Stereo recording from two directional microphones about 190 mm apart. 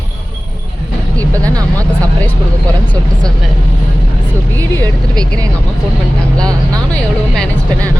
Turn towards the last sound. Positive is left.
turn(degrees=5)  # may be behind; listen again after turning